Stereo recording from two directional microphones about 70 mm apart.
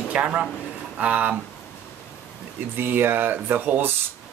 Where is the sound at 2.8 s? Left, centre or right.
Right.